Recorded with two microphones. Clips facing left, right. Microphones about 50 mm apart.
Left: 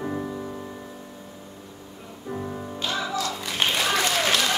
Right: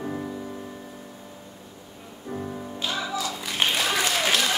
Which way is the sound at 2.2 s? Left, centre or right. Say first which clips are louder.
Left 1 dB; centre.